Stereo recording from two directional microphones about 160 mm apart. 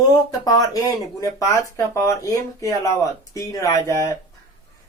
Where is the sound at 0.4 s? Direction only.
25° left (ahead or behind).